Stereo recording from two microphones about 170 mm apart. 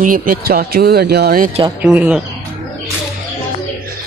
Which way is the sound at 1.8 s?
5° right (ahead or behind).